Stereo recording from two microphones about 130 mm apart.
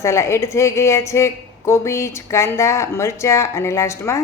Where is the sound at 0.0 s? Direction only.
20° left (ahead or behind).